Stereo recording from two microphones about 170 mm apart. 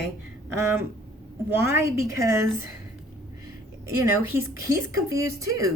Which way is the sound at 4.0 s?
15° right (ahead or behind).